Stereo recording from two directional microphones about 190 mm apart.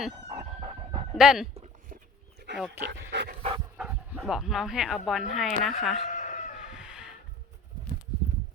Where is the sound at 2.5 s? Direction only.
65° right (ahead or behind).